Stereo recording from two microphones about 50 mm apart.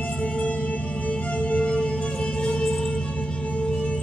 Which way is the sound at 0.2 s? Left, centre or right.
Left.